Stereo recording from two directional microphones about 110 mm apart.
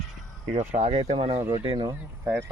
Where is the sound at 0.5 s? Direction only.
80° right.